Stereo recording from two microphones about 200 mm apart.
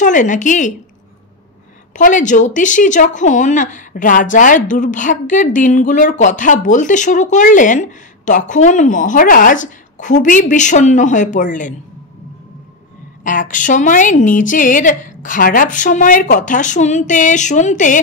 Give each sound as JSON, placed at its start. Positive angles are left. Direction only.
{"t": 0.0, "sound": "a woman's voice", "side_deg": 40}
{"t": 2.0, "sound": "a woman's voice", "side_deg": 40}
{"t": 13.2, "sound": "a woman's voice", "side_deg": 40}